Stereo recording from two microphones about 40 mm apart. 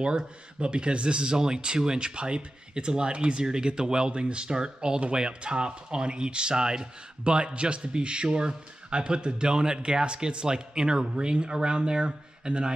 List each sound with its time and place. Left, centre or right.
0.0 s speech: right